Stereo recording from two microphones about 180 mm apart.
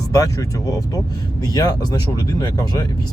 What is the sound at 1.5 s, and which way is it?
Speech, 20° left (ahead or behind).